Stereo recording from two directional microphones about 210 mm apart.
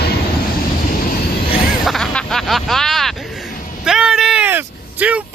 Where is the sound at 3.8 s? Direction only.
5° right (ahead or behind).